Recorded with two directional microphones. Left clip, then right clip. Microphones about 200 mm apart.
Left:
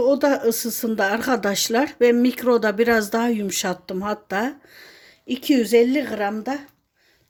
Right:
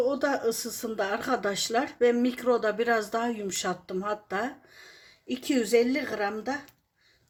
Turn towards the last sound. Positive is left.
turn(degrees=40)  # may be behind; listen again after turning